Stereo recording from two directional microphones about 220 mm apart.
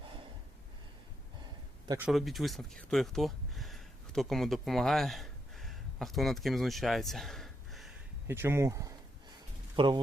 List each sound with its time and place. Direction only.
0.0 s snort: 25° right (ahead or behind)
2.0 s speech: centre (ahead or behind); by 10.0 s 20° right (ahead or behind)